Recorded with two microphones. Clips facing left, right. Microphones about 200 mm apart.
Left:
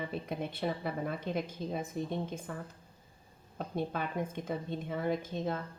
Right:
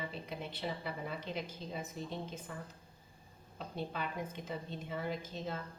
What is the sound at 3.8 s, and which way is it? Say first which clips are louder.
A woman's voice: left 5 dB; 50° left (ahead or behind).